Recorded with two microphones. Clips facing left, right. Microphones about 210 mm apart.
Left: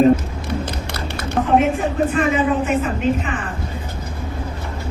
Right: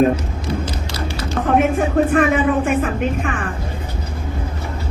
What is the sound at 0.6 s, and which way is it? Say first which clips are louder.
Music: right 1 dB; 60° left (ahead or behind).